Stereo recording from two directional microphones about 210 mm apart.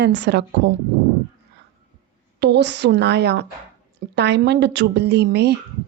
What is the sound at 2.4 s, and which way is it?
A woman's voice, 55° right (ahead or behind).